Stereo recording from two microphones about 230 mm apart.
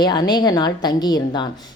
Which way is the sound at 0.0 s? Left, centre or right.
Centre.